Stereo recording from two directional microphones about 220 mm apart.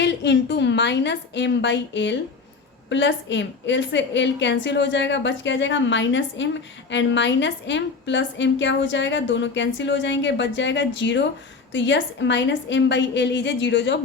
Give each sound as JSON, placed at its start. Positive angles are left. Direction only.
{"t": 0.0, "sound": "a woman's voice", "side_deg": 50}